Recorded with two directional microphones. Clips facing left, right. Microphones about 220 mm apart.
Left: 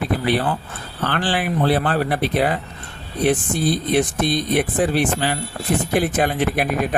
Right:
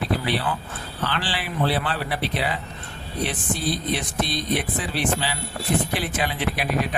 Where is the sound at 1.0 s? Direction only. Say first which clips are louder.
Left 7 dB; 50° left (ahead or behind).